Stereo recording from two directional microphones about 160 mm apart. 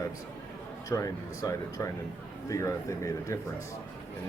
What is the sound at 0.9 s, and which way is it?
Speech, 20° left (ahead or behind).